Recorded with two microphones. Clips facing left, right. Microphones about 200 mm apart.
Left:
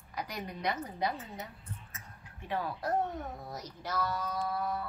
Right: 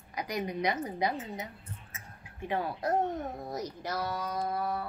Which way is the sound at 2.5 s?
20° right (ahead or behind).